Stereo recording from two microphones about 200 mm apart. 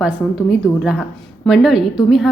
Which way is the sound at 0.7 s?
Centre (ahead or behind).